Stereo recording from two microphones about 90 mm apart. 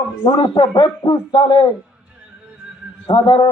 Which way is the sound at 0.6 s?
65° left (ahead or behind).